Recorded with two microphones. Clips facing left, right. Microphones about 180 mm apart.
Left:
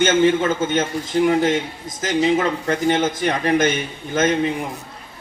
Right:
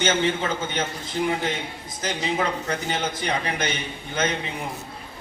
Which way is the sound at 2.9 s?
45° left (ahead or behind).